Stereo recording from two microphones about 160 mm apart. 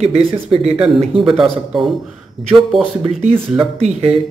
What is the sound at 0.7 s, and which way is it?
A man's voice, 5° right (ahead or behind).